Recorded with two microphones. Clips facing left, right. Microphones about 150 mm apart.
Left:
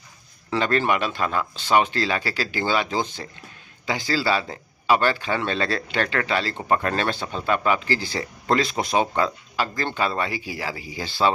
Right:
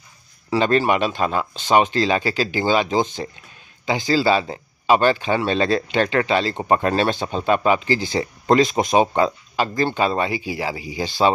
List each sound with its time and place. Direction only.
0.5 s speech: 20° right (ahead or behind)